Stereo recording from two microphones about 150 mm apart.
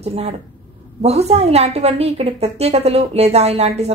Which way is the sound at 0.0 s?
45° right (ahead or behind).